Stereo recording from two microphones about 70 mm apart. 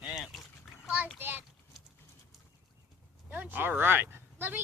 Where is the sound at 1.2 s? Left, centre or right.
Right.